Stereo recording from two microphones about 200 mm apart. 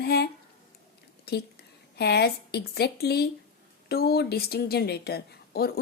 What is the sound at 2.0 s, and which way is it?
A woman's voice, 55° left (ahead or behind).